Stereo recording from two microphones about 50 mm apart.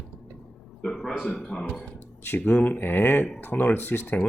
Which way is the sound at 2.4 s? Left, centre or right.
Left.